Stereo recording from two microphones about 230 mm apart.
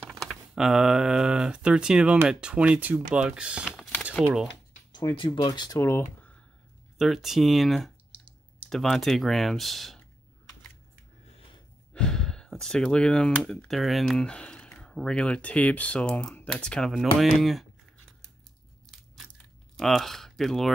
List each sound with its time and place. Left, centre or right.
0.1 s speech: centre
4.9 s speech: left
7.0 s speech: centre
11.9 s speech: centre
19.8 s speech: centre